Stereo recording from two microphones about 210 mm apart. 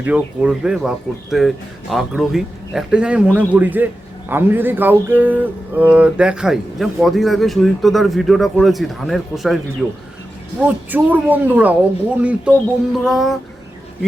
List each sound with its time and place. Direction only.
0.0 s speech: 5° right (ahead or behind)
10.6 s speech: 10° right (ahead or behind)